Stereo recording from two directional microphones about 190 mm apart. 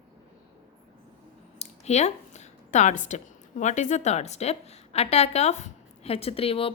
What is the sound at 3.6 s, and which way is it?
A woman's voice, 40° left (ahead or behind).